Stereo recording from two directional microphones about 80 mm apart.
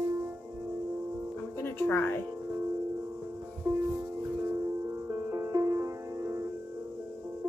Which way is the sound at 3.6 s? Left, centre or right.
Right.